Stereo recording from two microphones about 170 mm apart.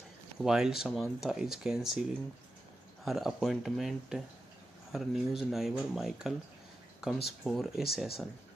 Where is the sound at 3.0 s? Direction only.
Centre (ahead or behind).